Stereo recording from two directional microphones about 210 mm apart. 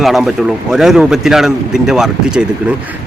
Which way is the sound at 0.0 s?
Centre (ahead or behind).